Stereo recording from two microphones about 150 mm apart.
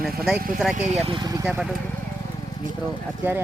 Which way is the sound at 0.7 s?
45° right (ahead or behind).